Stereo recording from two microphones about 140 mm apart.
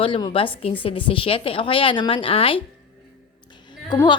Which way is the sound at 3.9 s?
30° left (ahead or behind).